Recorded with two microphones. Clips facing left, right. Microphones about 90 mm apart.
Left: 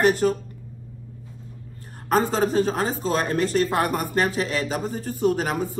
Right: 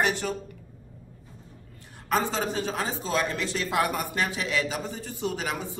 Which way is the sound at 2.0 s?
45° left (ahead or behind).